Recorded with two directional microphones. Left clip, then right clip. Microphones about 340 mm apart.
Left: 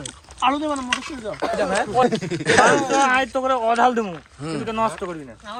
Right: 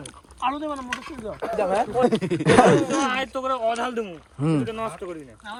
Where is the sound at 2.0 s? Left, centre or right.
Right.